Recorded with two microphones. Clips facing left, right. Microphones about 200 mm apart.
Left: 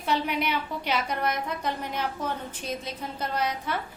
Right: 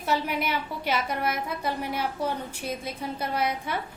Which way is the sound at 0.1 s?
5° right (ahead or behind).